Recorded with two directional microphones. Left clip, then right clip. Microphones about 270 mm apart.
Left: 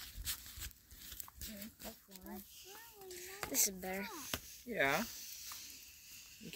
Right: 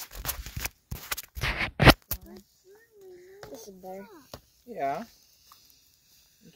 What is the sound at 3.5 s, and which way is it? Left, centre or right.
Speech, left.